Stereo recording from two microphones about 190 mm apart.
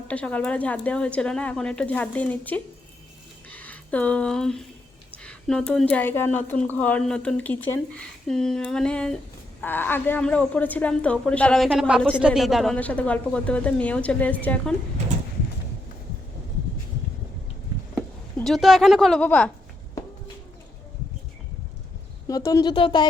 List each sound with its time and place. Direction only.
0.1 s speech: 5° left (ahead or behind)
17.9 s speech: centre (ahead or behind)
22.3 s speech: 20° left (ahead or behind)